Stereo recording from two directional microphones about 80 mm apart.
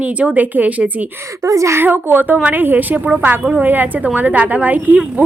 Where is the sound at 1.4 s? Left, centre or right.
Right.